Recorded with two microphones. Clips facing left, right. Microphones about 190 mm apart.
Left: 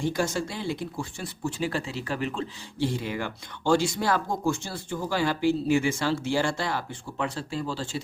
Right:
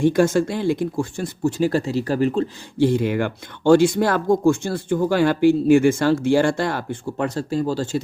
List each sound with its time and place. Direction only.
0.0 s speech: 55° right (ahead or behind); by 2.5 s 40° right (ahead or behind)
2.8 s speech: 60° right (ahead or behind); by 8.0 s 45° right (ahead or behind)